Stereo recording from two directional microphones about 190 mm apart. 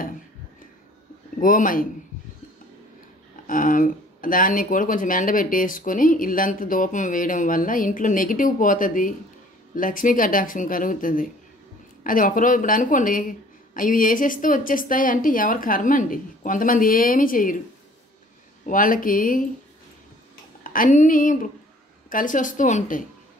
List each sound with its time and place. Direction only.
1.4 s speech: 45° left (ahead or behind)
3.4 s speech: 45° left (ahead or behind)
18.7 s speech: 45° left (ahead or behind)
20.6 s speech: 45° left (ahead or behind)